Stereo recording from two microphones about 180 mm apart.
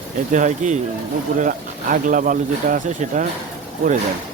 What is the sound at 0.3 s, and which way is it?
Speech, 45° right (ahead or behind).